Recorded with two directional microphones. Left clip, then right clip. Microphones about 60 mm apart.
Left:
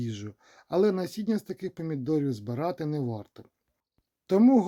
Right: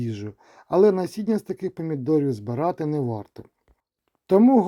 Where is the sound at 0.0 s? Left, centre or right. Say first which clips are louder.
Right 5 dB; right.